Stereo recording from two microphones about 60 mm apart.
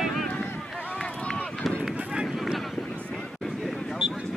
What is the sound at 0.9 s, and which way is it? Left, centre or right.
Run, centre.